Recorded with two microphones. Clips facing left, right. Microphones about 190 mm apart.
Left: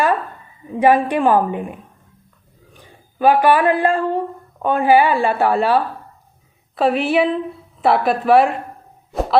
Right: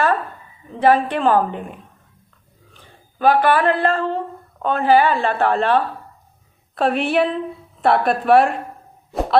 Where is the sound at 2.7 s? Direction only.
10° left (ahead or behind).